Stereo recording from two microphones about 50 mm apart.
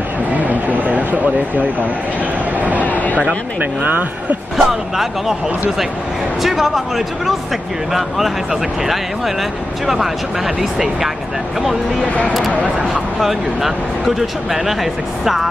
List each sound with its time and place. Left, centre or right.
0.5 s speech: right
3.8 s speech: right
4.6 s speech: centre
6.4 s speech: centre
9.8 s speech: centre
12.7 s speech: centre